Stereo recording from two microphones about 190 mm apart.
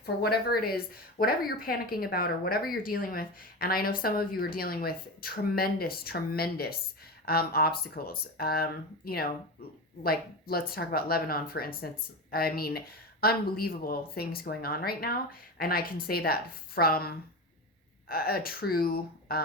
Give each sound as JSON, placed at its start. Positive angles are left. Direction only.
{"t": 0.0, "sound": "a woman's voice", "side_deg": 55}